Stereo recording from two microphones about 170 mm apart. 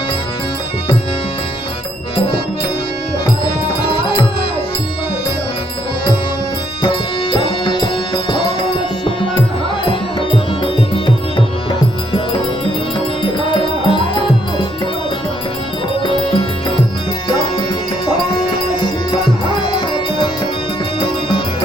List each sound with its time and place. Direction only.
2.1 s music: 35° left (ahead or behind)
3.4 s music: 30° left (ahead or behind)
6.8 s music: 30° left (ahead or behind)
9.9 s music: 30° left (ahead or behind)
13.2 s music: 30° left (ahead or behind)
16.0 s music: 30° left (ahead or behind)
19.7 s music: 25° left (ahead or behind)